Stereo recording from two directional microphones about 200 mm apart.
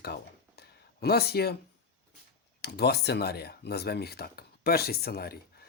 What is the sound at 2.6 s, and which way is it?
Speech, 55° left (ahead or behind).